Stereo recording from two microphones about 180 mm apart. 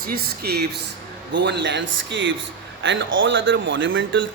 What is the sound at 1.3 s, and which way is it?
Speech, 75° right (ahead or behind).